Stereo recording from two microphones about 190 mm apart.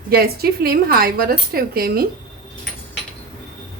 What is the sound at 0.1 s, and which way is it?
A woman's voice, 55° right (ahead or behind).